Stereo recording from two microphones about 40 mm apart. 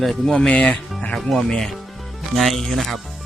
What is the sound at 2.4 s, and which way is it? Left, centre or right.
Speech, centre.